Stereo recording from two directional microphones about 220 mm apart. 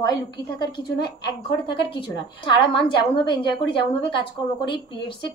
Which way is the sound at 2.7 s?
20° left (ahead or behind).